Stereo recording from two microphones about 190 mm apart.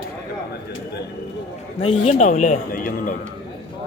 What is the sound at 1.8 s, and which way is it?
A man's voice, 35° left (ahead or behind).